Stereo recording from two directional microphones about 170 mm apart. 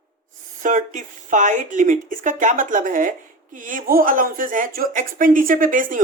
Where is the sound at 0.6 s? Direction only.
50° right (ahead or behind).